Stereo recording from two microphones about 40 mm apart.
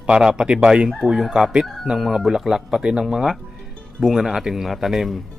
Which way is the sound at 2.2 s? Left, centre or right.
Centre.